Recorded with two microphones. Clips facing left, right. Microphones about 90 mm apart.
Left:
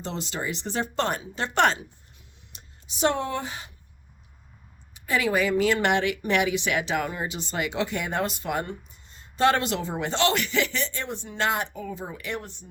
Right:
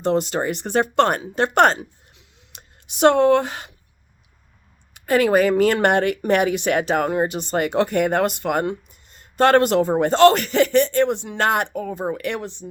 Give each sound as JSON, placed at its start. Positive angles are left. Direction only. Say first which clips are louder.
{"t": 0.0, "sound": "speech", "louder": "right 11 dB", "side_deg": -55}
{"t": 1.8, "sound": "a sound", "louder": "right 7 dB", "side_deg": -85}
{"t": 4.9, "sound": "speech", "louder": "right 8 dB", "side_deg": -55}
{"t": 11.3, "sound": "speech", "louder": "right 5 dB", "side_deg": -55}